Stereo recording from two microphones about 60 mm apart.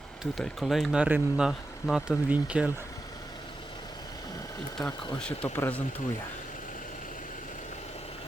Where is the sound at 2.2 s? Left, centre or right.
Right.